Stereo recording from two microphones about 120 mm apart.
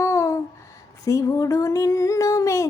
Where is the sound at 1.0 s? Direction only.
25° left (ahead or behind).